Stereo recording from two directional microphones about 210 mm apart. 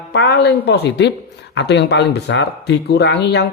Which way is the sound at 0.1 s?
55° left (ahead or behind).